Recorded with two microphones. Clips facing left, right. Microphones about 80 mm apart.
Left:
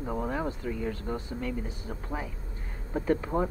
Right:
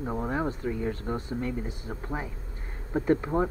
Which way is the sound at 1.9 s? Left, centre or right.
Centre.